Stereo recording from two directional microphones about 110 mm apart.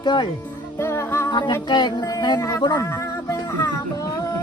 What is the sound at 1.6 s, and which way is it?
Speech, 40° left (ahead or behind).